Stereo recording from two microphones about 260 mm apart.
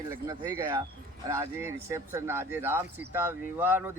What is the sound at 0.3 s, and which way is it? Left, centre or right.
Speech, centre.